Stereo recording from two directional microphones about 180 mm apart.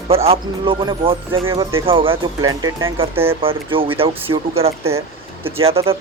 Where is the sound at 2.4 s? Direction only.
20° right (ahead or behind).